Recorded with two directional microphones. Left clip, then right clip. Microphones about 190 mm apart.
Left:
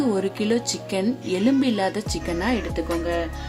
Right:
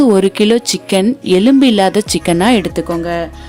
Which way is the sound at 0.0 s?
45° right (ahead or behind).